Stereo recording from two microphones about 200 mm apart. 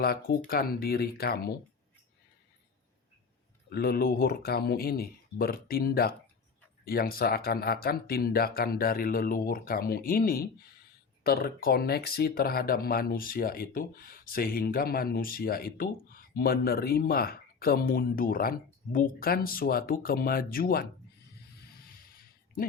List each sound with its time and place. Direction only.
0.0 s speech: 50° left (ahead or behind)
3.7 s speech: 50° left (ahead or behind)